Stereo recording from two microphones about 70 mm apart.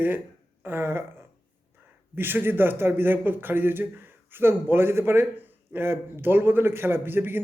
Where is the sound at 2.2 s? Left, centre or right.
Right.